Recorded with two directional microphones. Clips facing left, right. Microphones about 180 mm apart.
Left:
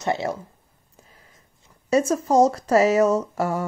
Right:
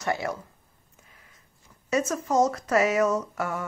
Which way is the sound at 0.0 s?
25° left (ahead or behind).